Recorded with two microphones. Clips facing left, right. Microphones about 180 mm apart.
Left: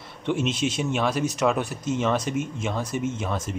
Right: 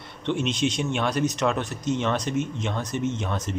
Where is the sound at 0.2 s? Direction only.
5° left (ahead or behind).